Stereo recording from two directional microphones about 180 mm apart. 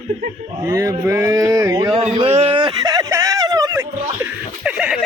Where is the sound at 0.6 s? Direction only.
15° right (ahead or behind).